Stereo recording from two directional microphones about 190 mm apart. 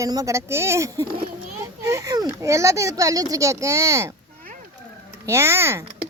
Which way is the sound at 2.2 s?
15° right (ahead or behind).